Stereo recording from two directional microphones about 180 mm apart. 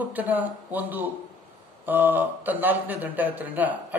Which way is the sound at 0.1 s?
10° right (ahead or behind).